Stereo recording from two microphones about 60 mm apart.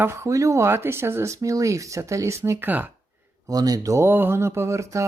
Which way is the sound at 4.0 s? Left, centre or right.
Right.